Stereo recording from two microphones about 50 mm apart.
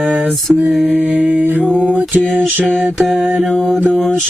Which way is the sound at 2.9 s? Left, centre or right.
Centre.